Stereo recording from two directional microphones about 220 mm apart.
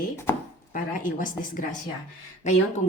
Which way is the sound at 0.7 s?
35° left (ahead or behind).